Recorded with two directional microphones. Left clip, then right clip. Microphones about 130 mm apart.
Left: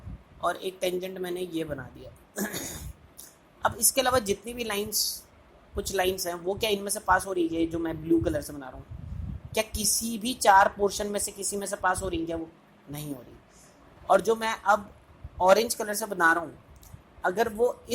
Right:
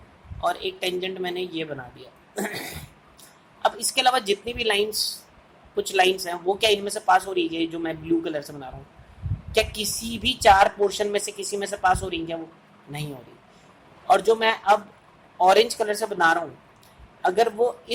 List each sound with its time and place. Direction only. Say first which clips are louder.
0.4 s a woman's voice: right 3 dB; 30° left (ahead or behind)
14.1 s a woman's voice: right 5 dB; 25° left (ahead or behind)